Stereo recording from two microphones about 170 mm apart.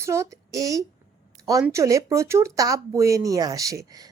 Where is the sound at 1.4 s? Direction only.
20° right (ahead or behind).